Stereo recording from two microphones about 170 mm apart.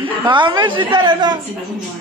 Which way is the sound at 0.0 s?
30° right (ahead or behind).